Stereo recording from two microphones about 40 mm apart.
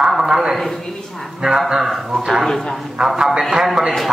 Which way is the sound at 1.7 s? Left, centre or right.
Centre.